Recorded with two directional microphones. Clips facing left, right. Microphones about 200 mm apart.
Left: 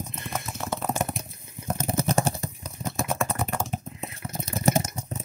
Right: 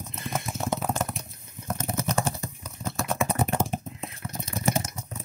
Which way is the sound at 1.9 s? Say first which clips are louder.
Left 3 dB; 30° left (ahead or behind).